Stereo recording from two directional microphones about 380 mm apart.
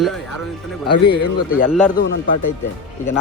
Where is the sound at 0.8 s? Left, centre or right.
Left.